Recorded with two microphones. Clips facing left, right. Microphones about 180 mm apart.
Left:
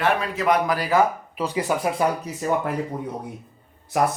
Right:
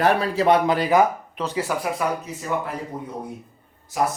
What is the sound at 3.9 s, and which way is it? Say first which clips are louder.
Speech: left 2 dB; 65° left (ahead or behind).